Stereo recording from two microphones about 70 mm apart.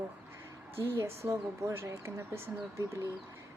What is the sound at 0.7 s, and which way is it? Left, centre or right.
A woman's voice, right.